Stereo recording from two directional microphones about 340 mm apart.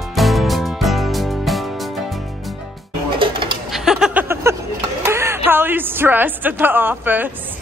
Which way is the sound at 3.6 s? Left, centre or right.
Centre.